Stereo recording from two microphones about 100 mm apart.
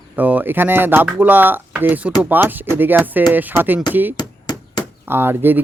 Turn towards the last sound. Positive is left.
turn(degrees=-20)  # may be behind; listen again after turning